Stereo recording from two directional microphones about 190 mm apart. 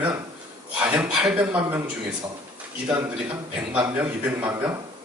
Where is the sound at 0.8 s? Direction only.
5° right (ahead or behind).